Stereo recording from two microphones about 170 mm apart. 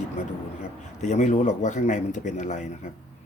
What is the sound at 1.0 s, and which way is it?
Speech, 45° left (ahead or behind).